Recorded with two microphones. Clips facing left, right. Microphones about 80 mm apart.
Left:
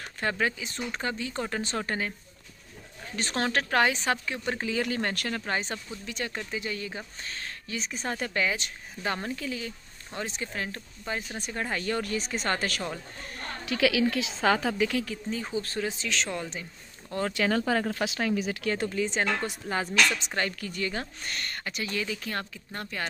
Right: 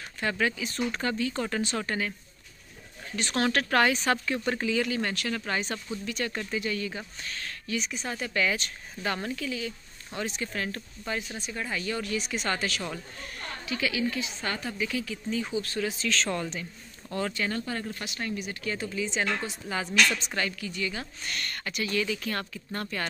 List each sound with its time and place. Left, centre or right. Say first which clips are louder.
0.2 s speech: even; left
1.6 s speech: right 1 dB; left
3.2 s speech: right 1 dB; left
3.4 s speech: right 1 dB; left
4.6 s speech: left 1 dB; left
5.4 s speech: even; left
8.4 s speech: right 4 dB; left
11.3 s speech: left 2 dB; left
13.7 s a woman's voice: left 5 dB; left
15.2 s speech: right 1 dB; left
17.3 s speech: left 6 dB; left
20.1 s speech: even; left
20.3 s speech: left 1 dB; left; by 23.0 s centre